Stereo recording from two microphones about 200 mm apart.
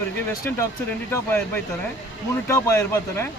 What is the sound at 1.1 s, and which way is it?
Speech, 10° left (ahead or behind).